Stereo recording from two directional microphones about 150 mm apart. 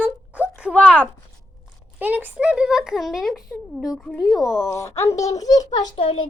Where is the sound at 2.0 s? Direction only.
10° right (ahead or behind).